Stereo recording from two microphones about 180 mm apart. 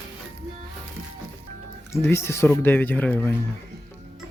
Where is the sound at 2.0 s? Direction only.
15° left (ahead or behind).